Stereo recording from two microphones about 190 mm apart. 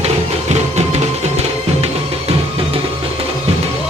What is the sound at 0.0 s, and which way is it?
Music, 35° right (ahead or behind).